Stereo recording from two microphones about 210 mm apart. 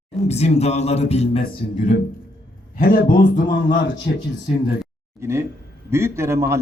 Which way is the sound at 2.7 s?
45° left (ahead or behind).